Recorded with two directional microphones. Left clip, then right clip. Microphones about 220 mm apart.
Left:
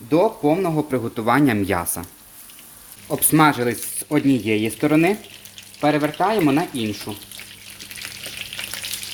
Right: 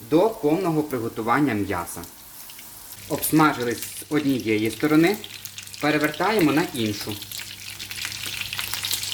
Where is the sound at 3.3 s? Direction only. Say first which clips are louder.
Left 3 dB; 45° left (ahead or behind); by 6.6 s 25° left (ahead or behind).